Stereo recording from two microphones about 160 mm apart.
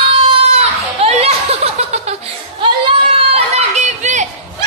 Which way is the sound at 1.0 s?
40° right (ahead or behind).